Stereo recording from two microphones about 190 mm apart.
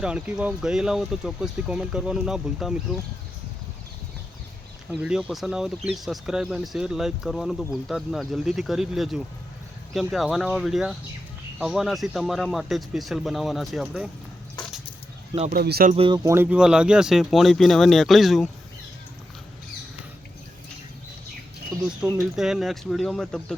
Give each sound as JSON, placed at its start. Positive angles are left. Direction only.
{"t": 0.0, "sound": "speech", "side_deg": -5}
{"t": 4.9, "sound": "speech", "side_deg": -5}
{"t": 15.5, "sound": "speech", "side_deg": -55}
{"t": 15.9, "sound": "speech", "side_deg": -25}
{"t": 22.0, "sound": "speech", "side_deg": -5}